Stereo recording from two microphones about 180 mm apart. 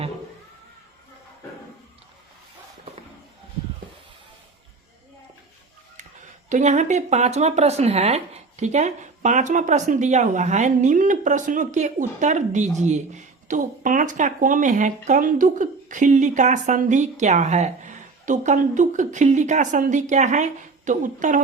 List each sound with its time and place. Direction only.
6.5 s speech: 40° right (ahead or behind)